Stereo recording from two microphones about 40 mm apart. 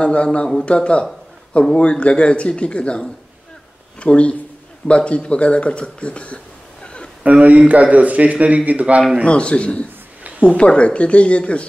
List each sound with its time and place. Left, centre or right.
0.0 s speech: left
7.2 s a man's voice: right
9.2 s speech: left